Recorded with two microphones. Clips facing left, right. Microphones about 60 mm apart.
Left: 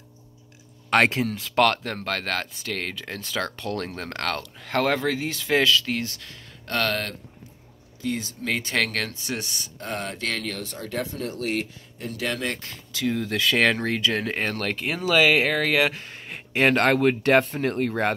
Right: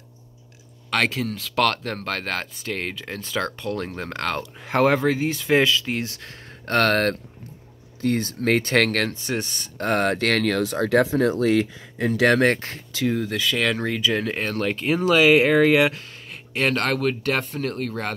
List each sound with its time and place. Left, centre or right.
0.8 s speech: left
1.2 s speech: centre
5.9 s speech: right
6.3 s speech: right
9.8 s speech: right
12.2 s speech: right
12.5 s speech: right
13.0 s speech: centre
16.0 s speech: left